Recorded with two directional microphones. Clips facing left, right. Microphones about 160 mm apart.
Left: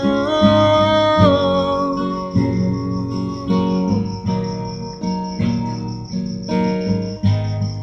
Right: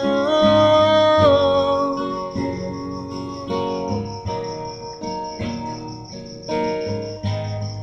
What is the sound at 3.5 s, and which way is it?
Music, 10° right (ahead or behind).